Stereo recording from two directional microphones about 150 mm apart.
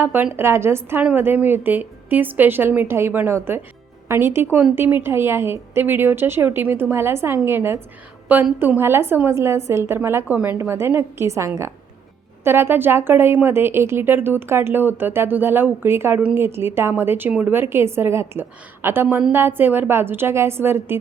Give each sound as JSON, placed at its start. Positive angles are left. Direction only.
{"t": 0.0, "sound": "a woman's voice", "side_deg": -15}